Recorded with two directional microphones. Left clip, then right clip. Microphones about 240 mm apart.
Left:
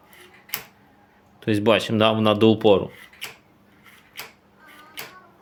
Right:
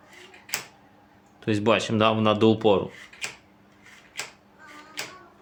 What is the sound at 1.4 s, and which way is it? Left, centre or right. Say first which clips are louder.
Speech: left 3 dB; centre.